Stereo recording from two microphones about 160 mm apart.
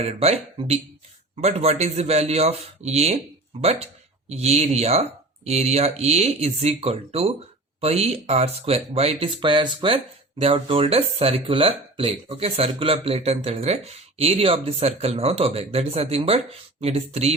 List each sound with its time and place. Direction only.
0.0 s speech: 40° right (ahead or behind)